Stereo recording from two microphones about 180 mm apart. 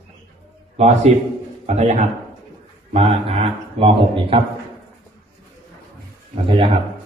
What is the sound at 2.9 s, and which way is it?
Speech, 35° right (ahead or behind).